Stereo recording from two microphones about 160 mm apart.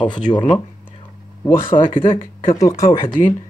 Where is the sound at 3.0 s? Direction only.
55° left (ahead or behind).